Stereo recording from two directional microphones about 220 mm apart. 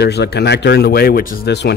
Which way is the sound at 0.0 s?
50° left (ahead or behind).